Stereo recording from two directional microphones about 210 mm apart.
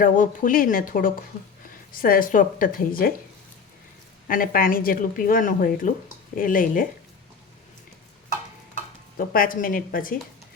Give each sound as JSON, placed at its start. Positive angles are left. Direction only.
{"t": 0.0, "sound": "speech", "side_deg": 40}
{"t": 4.3, "sound": "speech", "side_deg": 40}
{"t": 9.1, "sound": "speech", "side_deg": 40}